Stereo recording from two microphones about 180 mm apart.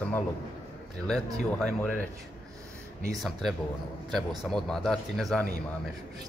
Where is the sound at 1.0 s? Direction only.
5° left (ahead or behind).